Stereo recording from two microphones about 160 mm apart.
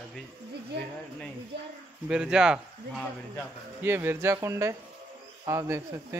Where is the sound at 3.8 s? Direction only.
15° right (ahead or behind).